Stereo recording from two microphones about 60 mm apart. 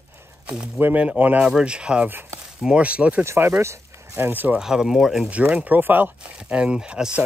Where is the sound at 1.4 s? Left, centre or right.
Centre.